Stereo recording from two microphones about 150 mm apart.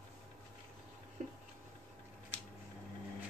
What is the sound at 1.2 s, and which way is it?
Tick-tock, 55° right (ahead or behind).